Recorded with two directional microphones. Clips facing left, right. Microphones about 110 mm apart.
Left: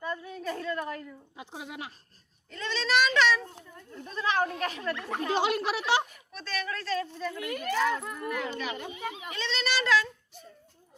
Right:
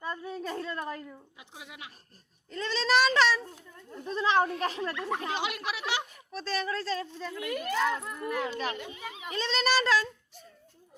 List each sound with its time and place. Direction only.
0.0 s a woman's voice: 30° right (ahead or behind)
1.4 s a child's voice: 35° left (ahead or behind)
2.5 s a child's voice: 35° right (ahead or behind)
5.3 s a child's voice: 30° left (ahead or behind)
6.3 s speech: 30° right (ahead or behind)
8.9 s a child's voice: 20° left (ahead or behind)
9.3 s a child's voice: 40° right (ahead or behind)